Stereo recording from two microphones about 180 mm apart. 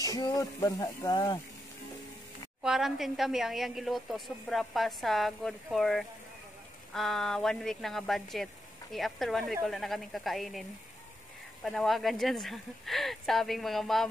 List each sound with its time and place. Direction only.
0.0 s speech: 20° left (ahead or behind)
2.6 s a woman's voice: centre (ahead or behind)
11.6 s a woman's voice: centre (ahead or behind)